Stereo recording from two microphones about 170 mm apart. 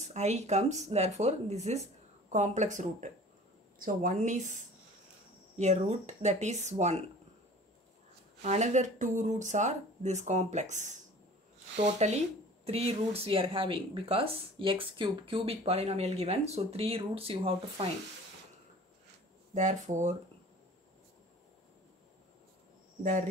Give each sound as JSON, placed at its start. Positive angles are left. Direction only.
{"t": 0.1, "sound": "speech", "side_deg": -40}
{"t": 8.4, "sound": "speech", "side_deg": -45}
{"t": 19.5, "sound": "speech", "side_deg": -45}